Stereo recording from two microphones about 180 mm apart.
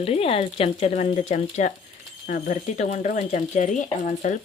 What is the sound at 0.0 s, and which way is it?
Speech, 35° left (ahead or behind).